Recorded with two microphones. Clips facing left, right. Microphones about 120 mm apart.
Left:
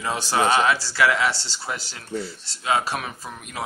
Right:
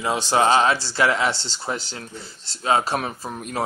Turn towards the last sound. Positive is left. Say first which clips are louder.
# right 6 dB
turn(degrees=-35)  # may be behind; listen again after turning